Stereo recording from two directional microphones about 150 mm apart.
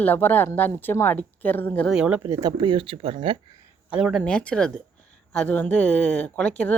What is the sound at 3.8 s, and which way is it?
Speech, 5° right (ahead or behind).